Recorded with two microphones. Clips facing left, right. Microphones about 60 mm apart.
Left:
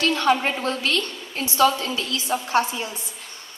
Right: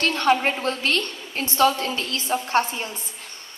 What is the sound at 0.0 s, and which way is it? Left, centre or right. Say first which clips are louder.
A woman's voice: even; right.